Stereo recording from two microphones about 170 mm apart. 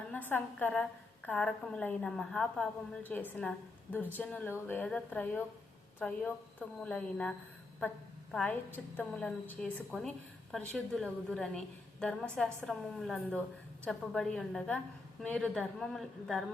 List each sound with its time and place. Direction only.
0.1 s a woman's voice: 10° left (ahead or behind)